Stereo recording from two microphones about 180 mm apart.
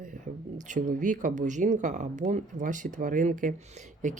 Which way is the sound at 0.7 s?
45° right (ahead or behind).